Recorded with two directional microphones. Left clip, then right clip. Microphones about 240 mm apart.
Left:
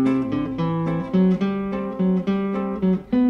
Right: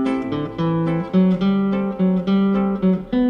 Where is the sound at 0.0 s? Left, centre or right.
Left.